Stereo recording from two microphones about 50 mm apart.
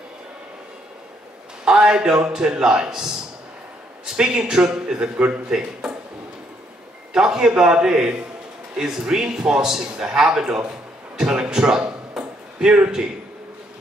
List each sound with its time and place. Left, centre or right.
1.6 s a man's voice: centre
7.2 s a man's voice: centre
12.2 s a sound: right